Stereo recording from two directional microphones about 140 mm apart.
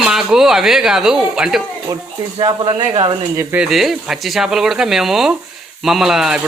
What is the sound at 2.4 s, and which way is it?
Speech, 35° right (ahead or behind).